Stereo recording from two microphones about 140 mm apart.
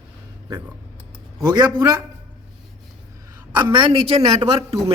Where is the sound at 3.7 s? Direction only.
35° right (ahead or behind).